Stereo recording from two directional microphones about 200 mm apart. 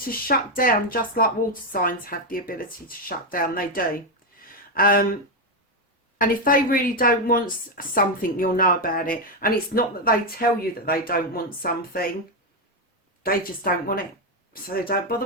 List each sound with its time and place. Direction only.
0.0 s speech: 45° left (ahead or behind)
6.1 s speech: 45° left (ahead or behind)
13.2 s speech: 45° left (ahead or behind)